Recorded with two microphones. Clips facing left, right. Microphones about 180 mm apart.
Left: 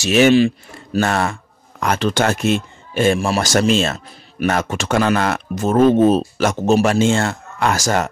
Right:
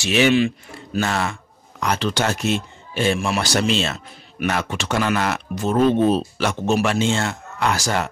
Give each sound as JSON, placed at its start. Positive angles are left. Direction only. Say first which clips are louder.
{"t": 0.0, "sound": "speech", "louder": "left 5 dB", "side_deg": 40}
{"t": 0.9, "sound": "speech", "louder": "left 4 dB", "side_deg": 50}
{"t": 3.2, "sound": "a man's voice", "louder": "left 4 dB", "side_deg": 40}